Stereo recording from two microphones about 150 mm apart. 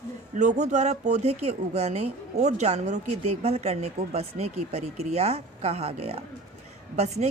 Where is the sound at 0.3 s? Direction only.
50° right (ahead or behind).